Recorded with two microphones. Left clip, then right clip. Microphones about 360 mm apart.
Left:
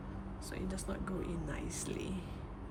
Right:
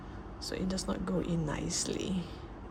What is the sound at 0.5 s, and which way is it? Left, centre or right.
Speech, centre.